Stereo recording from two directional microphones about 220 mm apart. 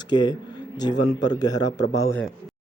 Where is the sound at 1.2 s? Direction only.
15° left (ahead or behind).